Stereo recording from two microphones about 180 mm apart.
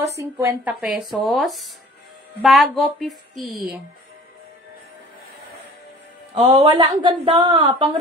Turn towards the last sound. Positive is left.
turn(degrees=-25)  # may be behind; listen again after turning